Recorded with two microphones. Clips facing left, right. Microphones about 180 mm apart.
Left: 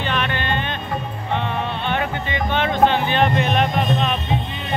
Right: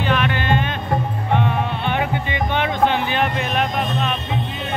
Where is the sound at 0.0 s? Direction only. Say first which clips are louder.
Right 3 dB; 5° right (ahead or behind).